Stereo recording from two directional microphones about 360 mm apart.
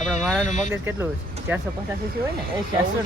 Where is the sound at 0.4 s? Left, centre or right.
Centre.